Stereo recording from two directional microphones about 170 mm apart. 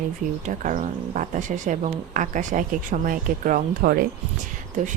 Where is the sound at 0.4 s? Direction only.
50° right (ahead or behind).